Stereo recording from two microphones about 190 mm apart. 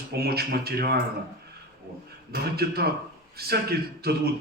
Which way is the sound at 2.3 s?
55° right (ahead or behind).